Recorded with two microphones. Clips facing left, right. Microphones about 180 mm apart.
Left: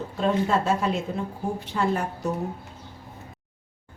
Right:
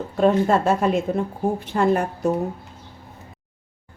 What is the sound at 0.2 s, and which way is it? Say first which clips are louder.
A woman's voice: right 6 dB; 55° right (ahead or behind).